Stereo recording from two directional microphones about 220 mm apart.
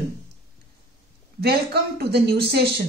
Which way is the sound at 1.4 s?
45° right (ahead or behind).